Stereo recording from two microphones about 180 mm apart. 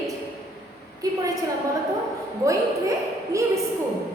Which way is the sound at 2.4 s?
20° right (ahead or behind).